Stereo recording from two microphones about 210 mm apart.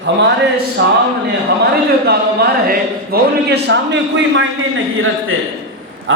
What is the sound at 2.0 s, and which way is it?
A man's voice, 45° right (ahead or behind).